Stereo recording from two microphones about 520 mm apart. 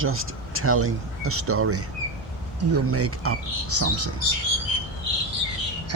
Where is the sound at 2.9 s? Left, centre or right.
Right.